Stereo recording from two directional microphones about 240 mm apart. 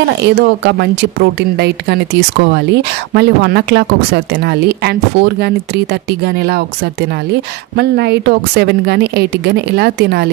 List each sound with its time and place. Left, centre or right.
0.2 s speech: right
7.7 s speech: right